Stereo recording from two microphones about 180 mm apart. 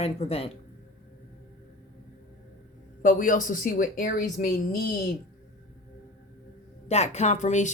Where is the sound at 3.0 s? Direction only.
50° left (ahead or behind).